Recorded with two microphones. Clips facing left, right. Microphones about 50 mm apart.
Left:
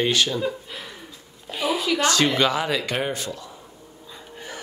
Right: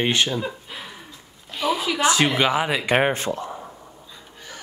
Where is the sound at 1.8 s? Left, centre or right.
Centre.